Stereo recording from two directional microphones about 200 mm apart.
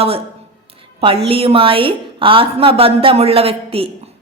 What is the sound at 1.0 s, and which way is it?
A woman's voice, 30° right (ahead or behind).